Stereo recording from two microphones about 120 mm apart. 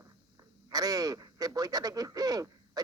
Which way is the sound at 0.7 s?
30° right (ahead or behind).